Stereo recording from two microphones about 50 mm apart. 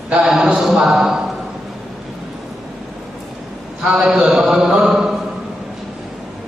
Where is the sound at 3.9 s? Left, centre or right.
Centre.